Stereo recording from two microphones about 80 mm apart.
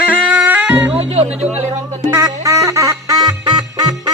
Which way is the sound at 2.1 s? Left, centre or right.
Right.